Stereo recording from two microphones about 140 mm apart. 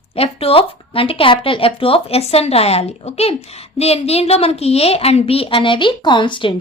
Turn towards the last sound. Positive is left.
turn(degrees=35)  # may be behind; listen again after turning